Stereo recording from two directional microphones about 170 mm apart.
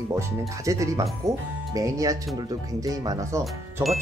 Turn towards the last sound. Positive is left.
turn(degrees=-15)  # may be behind; listen again after turning